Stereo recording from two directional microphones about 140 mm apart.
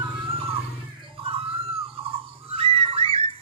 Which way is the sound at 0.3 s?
45° right (ahead or behind).